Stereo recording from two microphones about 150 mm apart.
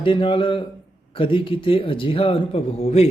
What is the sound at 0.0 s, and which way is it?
Speech, 35° left (ahead or behind).